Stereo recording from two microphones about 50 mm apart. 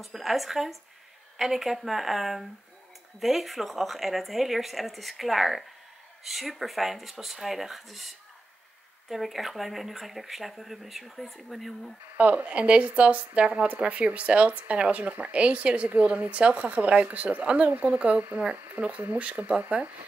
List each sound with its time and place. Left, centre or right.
0.0 s speech: centre
9.1 s speech: centre
12.2 s speech: right
15.9 s speech: right